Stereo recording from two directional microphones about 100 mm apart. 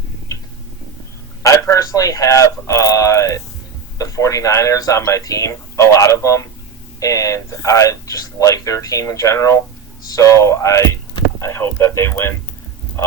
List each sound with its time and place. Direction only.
1.4 s a man's voice: 30° left (ahead or behind)